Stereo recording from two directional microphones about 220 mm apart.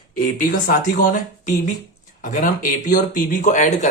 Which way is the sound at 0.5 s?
40° left (ahead or behind).